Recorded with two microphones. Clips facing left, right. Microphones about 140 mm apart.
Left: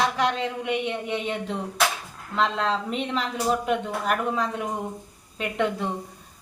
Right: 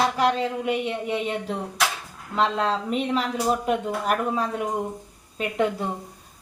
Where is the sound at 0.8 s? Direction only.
35° right (ahead or behind).